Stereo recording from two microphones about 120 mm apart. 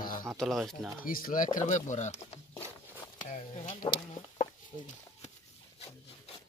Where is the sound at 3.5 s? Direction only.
60° left (ahead or behind).